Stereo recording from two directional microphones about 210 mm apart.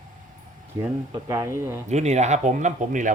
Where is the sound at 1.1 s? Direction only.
15° right (ahead or behind).